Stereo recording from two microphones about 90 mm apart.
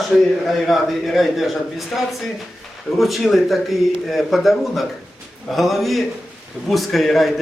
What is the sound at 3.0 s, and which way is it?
Speech, centre (ahead or behind).